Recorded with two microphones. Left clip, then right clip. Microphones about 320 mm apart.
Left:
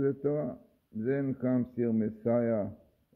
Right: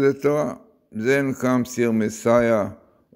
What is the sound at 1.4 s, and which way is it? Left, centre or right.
Speech, right.